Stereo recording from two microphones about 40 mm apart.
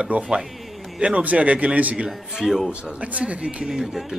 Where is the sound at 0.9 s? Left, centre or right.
Right.